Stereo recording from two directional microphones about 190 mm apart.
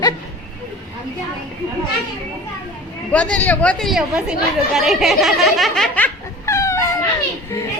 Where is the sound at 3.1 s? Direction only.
5° left (ahead or behind).